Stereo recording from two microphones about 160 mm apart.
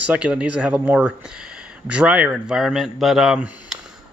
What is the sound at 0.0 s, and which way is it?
Speech, 10° right (ahead or behind).